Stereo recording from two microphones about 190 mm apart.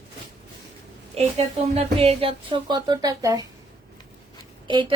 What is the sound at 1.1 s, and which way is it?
Speech, 30° right (ahead or behind).